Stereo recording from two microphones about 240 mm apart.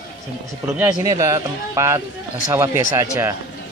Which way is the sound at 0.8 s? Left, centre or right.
Centre.